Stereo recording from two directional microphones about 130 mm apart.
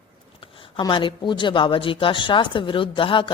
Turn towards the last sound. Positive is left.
turn(degrees=40)  # may be behind; listen again after turning